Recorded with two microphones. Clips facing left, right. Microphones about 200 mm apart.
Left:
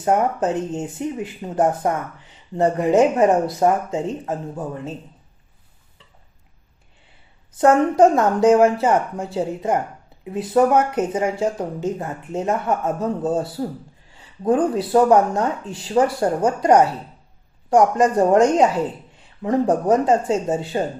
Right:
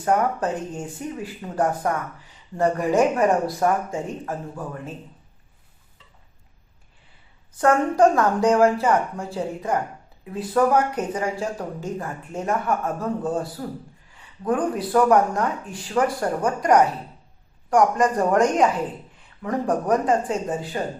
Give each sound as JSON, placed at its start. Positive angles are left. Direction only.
{"t": 0.0, "sound": "speech", "side_deg": 20}
{"t": 7.5, "sound": "speech", "side_deg": 20}